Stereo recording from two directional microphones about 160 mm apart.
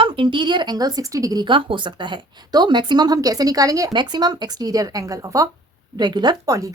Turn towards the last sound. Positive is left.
turn(degrees=-20)  # may be behind; listen again after turning